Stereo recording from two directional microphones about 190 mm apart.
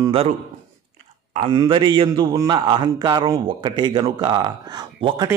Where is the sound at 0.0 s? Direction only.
30° right (ahead or behind).